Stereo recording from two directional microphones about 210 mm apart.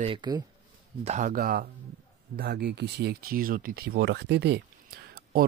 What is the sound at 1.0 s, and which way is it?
Speech, 35° right (ahead or behind).